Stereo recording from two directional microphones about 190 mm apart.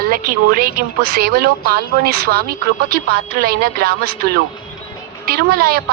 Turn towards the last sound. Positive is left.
turn(degrees=-55)  # may be behind; listen again after turning